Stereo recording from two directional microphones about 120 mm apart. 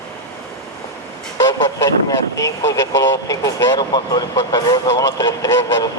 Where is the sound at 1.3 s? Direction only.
30° left (ahead or behind).